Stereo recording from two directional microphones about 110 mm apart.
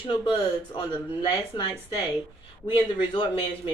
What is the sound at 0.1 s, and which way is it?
A woman's voice, 45° left (ahead or behind).